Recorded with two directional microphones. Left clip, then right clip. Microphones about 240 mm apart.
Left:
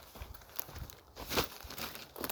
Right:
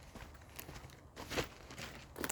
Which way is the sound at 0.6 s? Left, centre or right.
Left.